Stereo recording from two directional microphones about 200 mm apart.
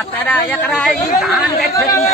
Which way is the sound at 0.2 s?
5° left (ahead or behind).